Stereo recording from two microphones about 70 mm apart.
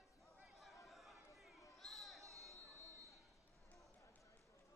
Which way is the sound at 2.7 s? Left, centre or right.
Right.